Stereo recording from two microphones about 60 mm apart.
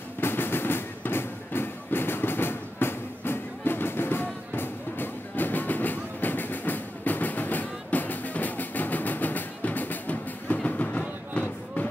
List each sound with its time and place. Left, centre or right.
0.2 s music: left